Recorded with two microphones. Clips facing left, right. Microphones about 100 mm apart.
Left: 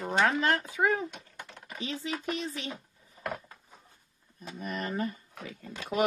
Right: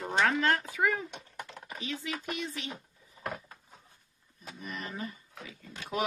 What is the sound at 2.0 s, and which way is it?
Speech, 35° left (ahead or behind).